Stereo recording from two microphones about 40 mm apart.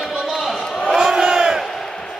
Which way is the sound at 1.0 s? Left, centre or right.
Centre.